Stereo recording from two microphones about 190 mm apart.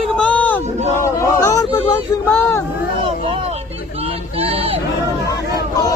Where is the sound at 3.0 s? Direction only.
30° right (ahead or behind).